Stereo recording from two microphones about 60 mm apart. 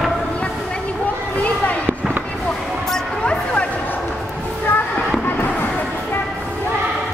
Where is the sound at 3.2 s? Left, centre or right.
Centre.